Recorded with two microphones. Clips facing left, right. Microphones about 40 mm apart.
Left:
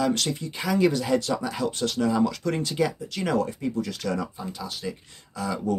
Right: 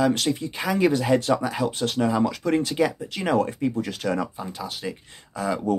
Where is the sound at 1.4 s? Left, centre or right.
Centre.